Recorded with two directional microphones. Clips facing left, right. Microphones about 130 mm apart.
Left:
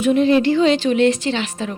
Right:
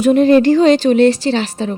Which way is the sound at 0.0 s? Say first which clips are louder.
Right 5 dB; 45° right (ahead or behind).